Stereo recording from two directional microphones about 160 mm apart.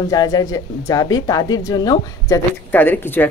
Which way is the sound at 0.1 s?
20° left (ahead or behind).